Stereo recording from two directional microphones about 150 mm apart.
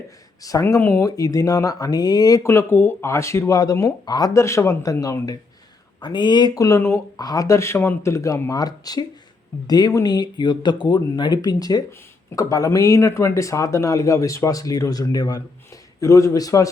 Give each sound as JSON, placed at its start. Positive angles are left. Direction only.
{"t": 0.4, "sound": "speech", "side_deg": 20}
{"t": 6.6, "sound": "speech", "side_deg": 20}